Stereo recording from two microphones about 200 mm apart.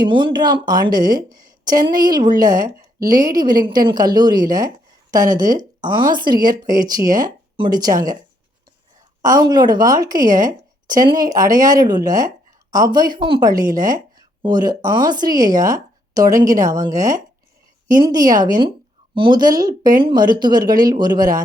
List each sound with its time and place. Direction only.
0.0 s speech: 25° right (ahead or behind)
9.2 s speech: 20° right (ahead or behind)